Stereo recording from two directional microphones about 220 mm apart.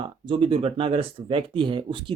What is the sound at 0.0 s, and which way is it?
Speech, 25° right (ahead or behind).